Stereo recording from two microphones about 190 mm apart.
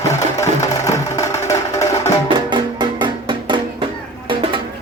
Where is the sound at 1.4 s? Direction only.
15° left (ahead or behind).